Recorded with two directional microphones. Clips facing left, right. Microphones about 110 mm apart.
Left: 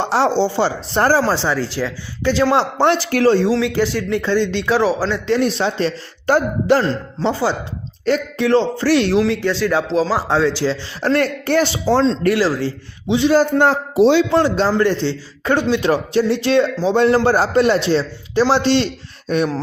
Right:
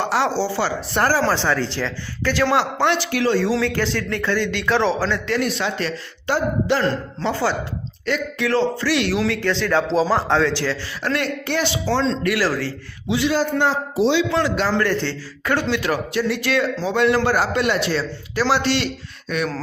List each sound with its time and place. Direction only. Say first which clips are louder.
0.0 s speech: left 4 dB; 30° left (ahead or behind)
1.3 s a man's voice: left 1 dB; 15° left (ahead or behind); by 3.3 s 40° left (ahead or behind)
3.6 s a man's voice: left 3 dB; 15° left (ahead or behind)
5.4 s a man's voice: left 5 dB; 30° left (ahead or behind)
6.2 s a man's voice: left 5 dB; 45° left (ahead or behind)
7.2 s a man's voice: left 4 dB; 20° left (ahead or behind)
8.0 s a man's voice: left 5 dB; 35° left (ahead or behind)
9.3 s a man's voice: left 2 dB; 15° left (ahead or behind)
11.0 s a man's voice: left 6 dB; 40° left (ahead or behind)
12.3 s speech: left 4 dB; 20° left (ahead or behind)
13.2 s a man's voice: left 6 dB; 45° left (ahead or behind)
14.3 s speech: left 5 dB; 30° left (ahead or behind)
14.8 s a man's voice: left 4 dB; 20° left (ahead or behind)